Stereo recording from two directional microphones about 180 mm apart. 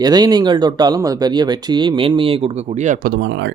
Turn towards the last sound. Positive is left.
turn(degrees=-80)